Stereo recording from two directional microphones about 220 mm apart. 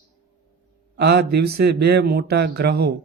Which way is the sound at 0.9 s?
50° right (ahead or behind).